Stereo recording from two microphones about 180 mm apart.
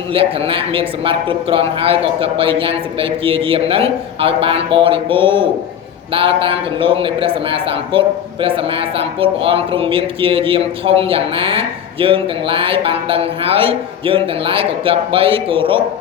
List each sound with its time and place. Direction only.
0.1 s a man's voice: 30° right (ahead or behind)